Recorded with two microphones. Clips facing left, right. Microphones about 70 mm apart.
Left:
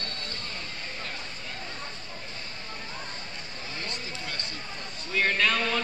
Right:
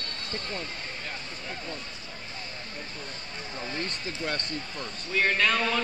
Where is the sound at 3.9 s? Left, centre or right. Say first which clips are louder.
Right 4 dB; right.